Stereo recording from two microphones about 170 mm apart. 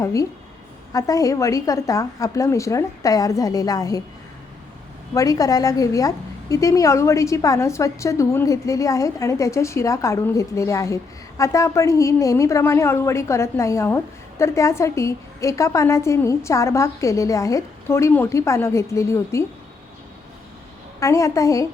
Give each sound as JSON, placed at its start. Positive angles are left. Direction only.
{"t": 0.0, "sound": "a woman's voice", "side_deg": 20}
{"t": 5.1, "sound": "a woman's voice", "side_deg": 20}
{"t": 21.0, "sound": "a woman's voice", "side_deg": 20}